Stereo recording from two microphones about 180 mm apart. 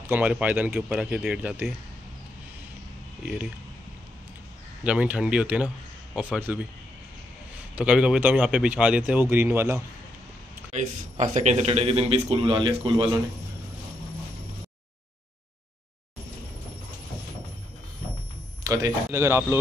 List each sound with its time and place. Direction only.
0.1 s a man's voice: 10° right (ahead or behind)
3.3 s speech: 5° right (ahead or behind)
4.8 s a man's voice: 5° right (ahead or behind)
7.7 s a man's voice: 5° right (ahead or behind)
10.7 s speech: 40° right (ahead or behind)
18.6 s a man's voice: 20° right (ahead or behind)